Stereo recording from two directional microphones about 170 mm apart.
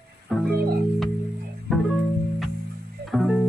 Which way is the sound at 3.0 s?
Centre (ahead or behind).